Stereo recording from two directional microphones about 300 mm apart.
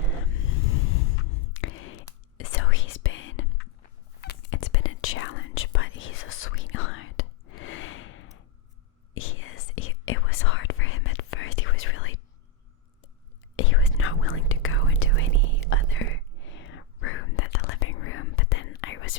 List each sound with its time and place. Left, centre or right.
0.2 s vehicle: left
1.0 s a sound: left
2.4 s whispering: left
13.6 s whispering: left